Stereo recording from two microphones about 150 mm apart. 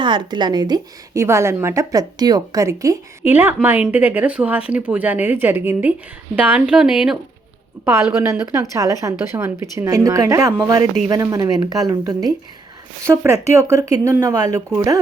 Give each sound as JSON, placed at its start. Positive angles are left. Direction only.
{"t": 0.0, "sound": "a woman's voice", "side_deg": -30}
{"t": 7.9, "sound": "a woman's voice", "side_deg": -15}